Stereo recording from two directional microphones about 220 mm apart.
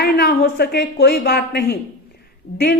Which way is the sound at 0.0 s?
45° left (ahead or behind).